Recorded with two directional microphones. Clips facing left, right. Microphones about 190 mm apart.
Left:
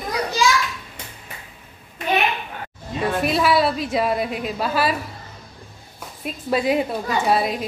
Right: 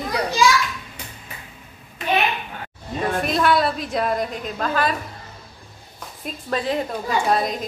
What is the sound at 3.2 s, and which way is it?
A woman's voice, 5° left (ahead or behind).